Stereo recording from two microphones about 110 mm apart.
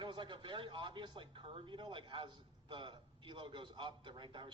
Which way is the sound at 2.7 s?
45° right (ahead or behind).